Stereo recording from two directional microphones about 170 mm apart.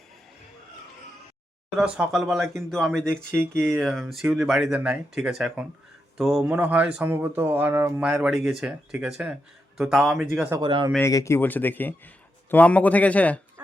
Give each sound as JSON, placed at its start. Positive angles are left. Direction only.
{"t": 1.7, "sound": "speech", "side_deg": -5}
{"t": 10.6, "sound": "speech", "side_deg": -30}
{"t": 10.9, "sound": "a man's voice", "side_deg": 15}